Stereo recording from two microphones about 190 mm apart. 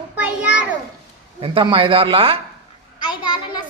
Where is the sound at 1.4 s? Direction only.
30° right (ahead or behind).